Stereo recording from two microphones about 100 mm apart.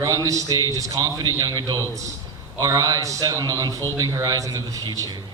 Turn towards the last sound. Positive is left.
turn(degrees=-40)  # may be behind; listen again after turning